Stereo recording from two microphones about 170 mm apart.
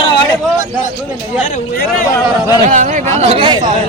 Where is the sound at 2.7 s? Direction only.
45° right (ahead or behind); by 3.6 s 30° right (ahead or behind).